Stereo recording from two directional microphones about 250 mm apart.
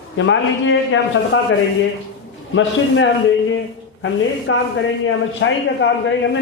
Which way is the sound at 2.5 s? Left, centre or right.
Left.